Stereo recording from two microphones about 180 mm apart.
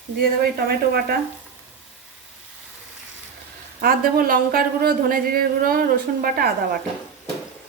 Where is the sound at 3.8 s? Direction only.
55° right (ahead or behind).